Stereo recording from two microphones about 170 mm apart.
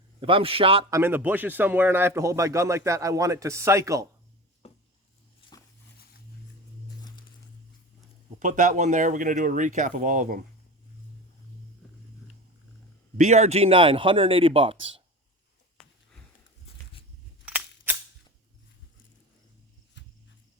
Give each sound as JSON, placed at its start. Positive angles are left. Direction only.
{"t": 0.2, "sound": "a man's voice", "side_deg": -30}
{"t": 0.9, "sound": "a man's voice", "side_deg": -15}
{"t": 4.6, "sound": "a sound", "side_deg": 40}
{"t": 8.4, "sound": "speech", "side_deg": -50}
{"t": 13.1, "sound": "a man's voice", "side_deg": -40}
{"t": 17.4, "sound": "a sound", "side_deg": -10}
{"t": 20.0, "sound": "cricket", "side_deg": 90}